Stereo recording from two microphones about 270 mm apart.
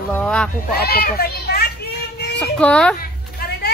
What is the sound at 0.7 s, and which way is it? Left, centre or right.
Speech, left.